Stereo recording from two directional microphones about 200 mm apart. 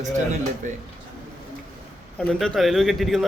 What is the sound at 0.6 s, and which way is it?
Speech, 40° right (ahead or behind).